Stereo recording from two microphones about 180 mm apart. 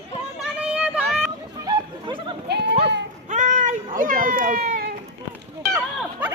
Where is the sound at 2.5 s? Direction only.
70° right (ahead or behind).